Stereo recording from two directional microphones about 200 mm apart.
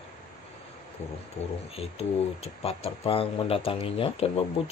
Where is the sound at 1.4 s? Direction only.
30° left (ahead or behind).